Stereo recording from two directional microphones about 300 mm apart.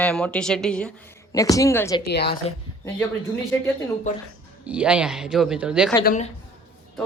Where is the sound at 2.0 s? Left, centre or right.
Left.